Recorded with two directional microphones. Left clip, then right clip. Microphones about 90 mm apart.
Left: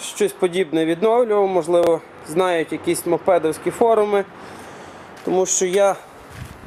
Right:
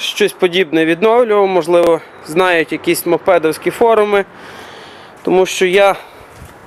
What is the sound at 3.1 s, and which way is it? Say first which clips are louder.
Speech: right 5 dB; 35° right (ahead or behind).